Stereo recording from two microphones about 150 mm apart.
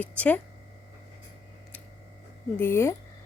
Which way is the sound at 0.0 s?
10° left (ahead or behind).